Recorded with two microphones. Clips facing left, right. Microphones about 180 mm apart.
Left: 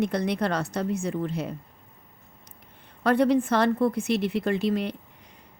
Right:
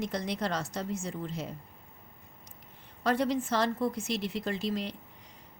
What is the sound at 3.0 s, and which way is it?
Speech, 60° left (ahead or behind).